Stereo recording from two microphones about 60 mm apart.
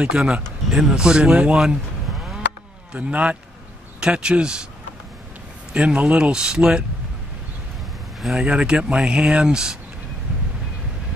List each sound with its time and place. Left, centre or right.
0.0 s speech: centre
2.9 s a man's voice: right
5.7 s speech: centre
8.4 s speech: centre